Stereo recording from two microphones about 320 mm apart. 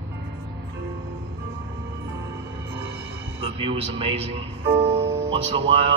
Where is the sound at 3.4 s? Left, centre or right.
Centre.